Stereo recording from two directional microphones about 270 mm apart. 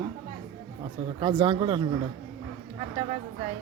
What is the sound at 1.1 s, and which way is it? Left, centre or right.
Speech, centre.